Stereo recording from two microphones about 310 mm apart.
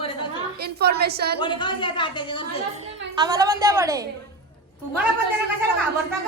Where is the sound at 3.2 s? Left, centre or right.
Centre.